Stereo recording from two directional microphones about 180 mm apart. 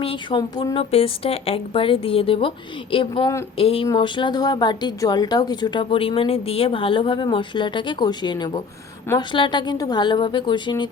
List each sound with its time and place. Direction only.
0.0 s speech: 30° left (ahead or behind)